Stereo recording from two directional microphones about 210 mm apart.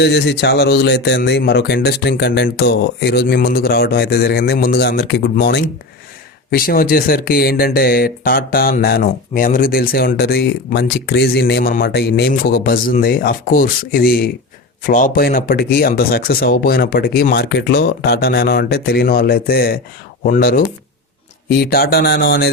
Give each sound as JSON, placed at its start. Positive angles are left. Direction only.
{"t": 0.0, "sound": "speech", "side_deg": 55}